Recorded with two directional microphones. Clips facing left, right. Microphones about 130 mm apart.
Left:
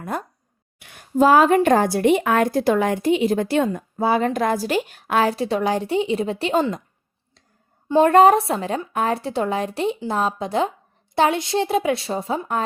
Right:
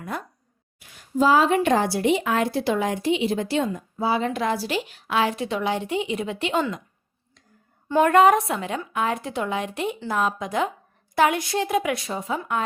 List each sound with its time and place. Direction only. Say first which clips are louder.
0.0 s speech: left 4 dB; 45° left (ahead or behind)
0.8 s a woman's voice: left 4 dB; 60° left (ahead or behind); by 6.8 s 35° left (ahead or behind)
7.9 s a woman's voice: left 4 dB; 20° left (ahead or behind)
8.1 s a woman's voice: left 2 dB; 35° left (ahead or behind)